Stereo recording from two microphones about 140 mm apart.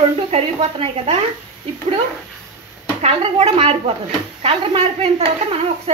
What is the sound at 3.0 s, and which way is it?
Speech, 50° right (ahead or behind).